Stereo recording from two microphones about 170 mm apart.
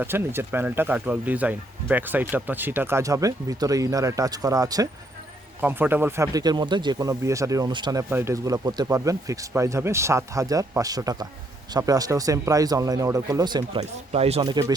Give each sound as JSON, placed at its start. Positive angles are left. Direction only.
{"t": 0.0, "sound": "speech", "side_deg": -15}
{"t": 13.7, "sound": "speech", "side_deg": -40}
{"t": 14.4, "sound": "speech", "side_deg": -25}